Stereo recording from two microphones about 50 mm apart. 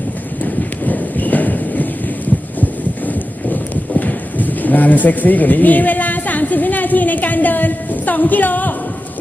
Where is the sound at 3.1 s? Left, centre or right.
Left.